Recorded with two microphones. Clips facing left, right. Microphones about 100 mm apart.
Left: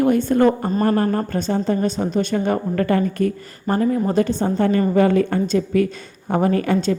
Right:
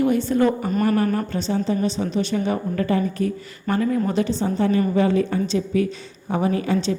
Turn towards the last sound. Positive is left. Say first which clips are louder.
# left 3 dB
turn(degrees=55)  # may be behind; listen again after turning